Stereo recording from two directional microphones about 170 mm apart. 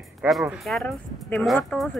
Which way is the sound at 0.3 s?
Centre (ahead or behind).